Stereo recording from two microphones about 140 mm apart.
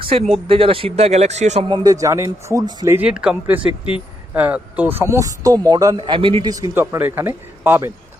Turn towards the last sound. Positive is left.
turn(degrees=-15)  # may be behind; listen again after turning